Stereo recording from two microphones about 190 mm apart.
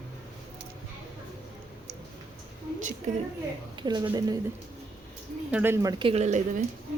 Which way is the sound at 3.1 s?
40° right (ahead or behind).